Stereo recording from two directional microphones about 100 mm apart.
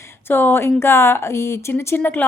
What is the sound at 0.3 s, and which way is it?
A woman's voice, 20° left (ahead or behind).